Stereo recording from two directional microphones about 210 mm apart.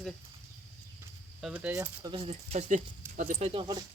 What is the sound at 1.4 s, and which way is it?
Speech, 5° right (ahead or behind).